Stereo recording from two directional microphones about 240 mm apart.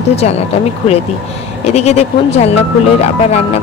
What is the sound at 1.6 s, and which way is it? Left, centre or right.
Speech, left.